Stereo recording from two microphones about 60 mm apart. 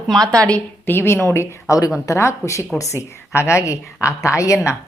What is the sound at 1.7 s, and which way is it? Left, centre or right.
A woman's voice, left.